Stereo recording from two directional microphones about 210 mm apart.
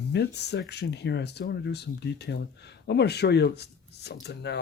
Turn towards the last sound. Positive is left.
turn(degrees=50)  # may be behind; listen again after turning